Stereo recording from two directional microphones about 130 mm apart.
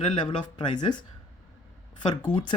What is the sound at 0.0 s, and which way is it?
Speech, 40° left (ahead or behind).